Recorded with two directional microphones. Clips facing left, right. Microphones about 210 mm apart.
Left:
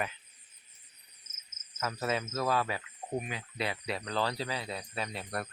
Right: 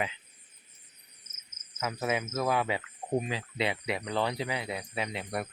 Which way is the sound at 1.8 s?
15° right (ahead or behind).